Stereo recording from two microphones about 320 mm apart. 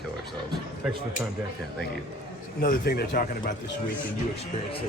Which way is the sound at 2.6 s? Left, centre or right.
Left.